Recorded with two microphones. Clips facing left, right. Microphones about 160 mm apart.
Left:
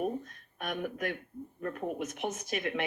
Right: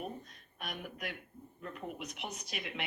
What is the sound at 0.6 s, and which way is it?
Speech, 50° left (ahead or behind).